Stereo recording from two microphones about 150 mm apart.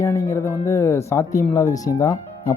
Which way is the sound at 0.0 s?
20° left (ahead or behind).